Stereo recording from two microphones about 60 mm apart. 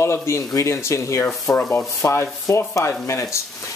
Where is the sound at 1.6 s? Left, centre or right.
Left.